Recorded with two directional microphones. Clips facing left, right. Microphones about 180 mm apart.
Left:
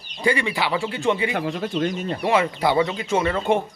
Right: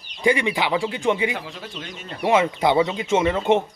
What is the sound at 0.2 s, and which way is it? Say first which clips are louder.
Speech: right 2 dB; 15° right (ahead or behind).